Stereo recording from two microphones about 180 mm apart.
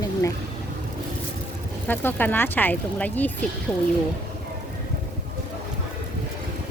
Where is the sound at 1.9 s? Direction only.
10° left (ahead or behind).